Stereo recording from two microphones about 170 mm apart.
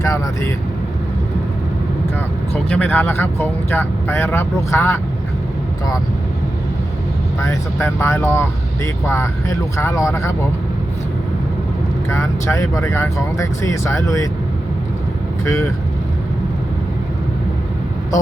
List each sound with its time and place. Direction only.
0.0 s speech: 20° left (ahead or behind)
2.6 s speech: 10° left (ahead or behind)
7.4 s speech: 15° left (ahead or behind)
12.1 s speech: 20° left (ahead or behind)
15.4 s speech: 20° left (ahead or behind)